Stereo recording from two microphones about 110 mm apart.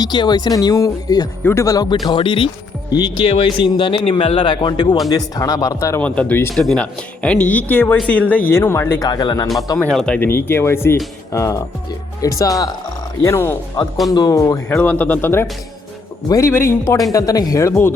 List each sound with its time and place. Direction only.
0.0 s speech: 40° left (ahead or behind)
2.0 s speech: 50° left (ahead or behind); by 6.0 s 30° left (ahead or behind)
6.0 s speech: 10° left (ahead or behind)
6.5 s speech: 5° left (ahead or behind); by 9.0 s 25° left (ahead or behind)
9.0 s speech: 35° left (ahead or behind)
9.7 s speech: 5° left (ahead or behind)
10.2 s speech: 20° left (ahead or behind)
14.1 s speech: 35° left (ahead or behind)
14.8 s speech: 15° left (ahead or behind)